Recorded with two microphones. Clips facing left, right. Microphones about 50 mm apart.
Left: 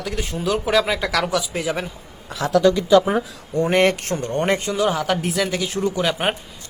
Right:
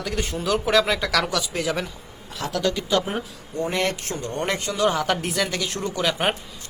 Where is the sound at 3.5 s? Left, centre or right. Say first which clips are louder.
Left 7 dB; left.